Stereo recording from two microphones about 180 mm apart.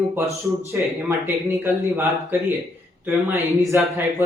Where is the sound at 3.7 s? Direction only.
15° right (ahead or behind).